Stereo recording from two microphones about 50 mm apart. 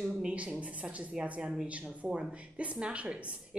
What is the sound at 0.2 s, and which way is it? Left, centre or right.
A woman's voice, right.